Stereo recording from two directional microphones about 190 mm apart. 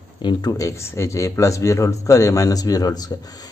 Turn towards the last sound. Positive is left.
turn(degrees=20)  # may be behind; listen again after turning